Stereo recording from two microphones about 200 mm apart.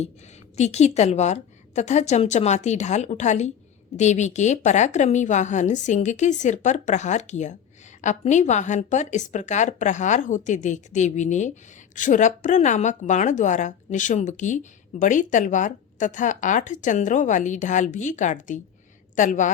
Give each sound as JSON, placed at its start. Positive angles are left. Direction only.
{"t": 0.5, "sound": "a woman's voice", "side_deg": 35}